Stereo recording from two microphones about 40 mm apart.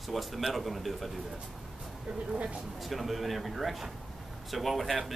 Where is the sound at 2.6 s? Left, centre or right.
Centre.